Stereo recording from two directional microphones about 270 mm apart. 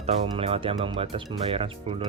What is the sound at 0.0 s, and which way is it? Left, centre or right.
Speech, right.